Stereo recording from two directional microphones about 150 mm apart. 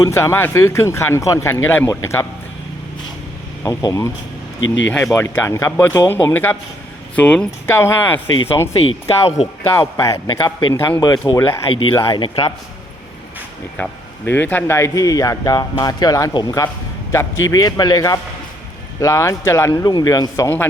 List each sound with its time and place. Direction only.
0.0 s a man's voice: 20° left (ahead or behind)
3.6 s a man's voice: 20° left (ahead or behind)
5.1 s speech: 15° left (ahead or behind)
8.7 s a man's voice: 40° left (ahead or behind)
9.7 s a man's voice: 20° left (ahead or behind)
12.0 s a man's voice: 35° left (ahead or behind)
13.7 s a man's voice: 10° left (ahead or behind)